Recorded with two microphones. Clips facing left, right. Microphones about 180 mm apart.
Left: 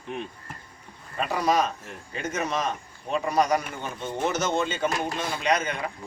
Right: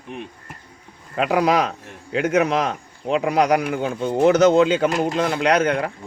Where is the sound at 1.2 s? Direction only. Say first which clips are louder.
Right 6 dB; 70° right (ahead or behind).